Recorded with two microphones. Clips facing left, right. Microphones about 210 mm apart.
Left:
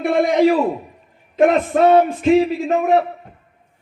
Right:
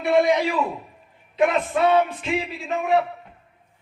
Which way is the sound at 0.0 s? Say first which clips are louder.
Left 4 dB; 50° left (ahead or behind).